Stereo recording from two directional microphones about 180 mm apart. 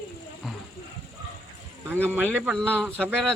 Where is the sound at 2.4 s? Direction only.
10° right (ahead or behind).